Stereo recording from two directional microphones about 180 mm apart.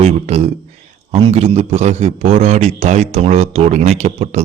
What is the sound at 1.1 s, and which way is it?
Speech, 35° right (ahead or behind).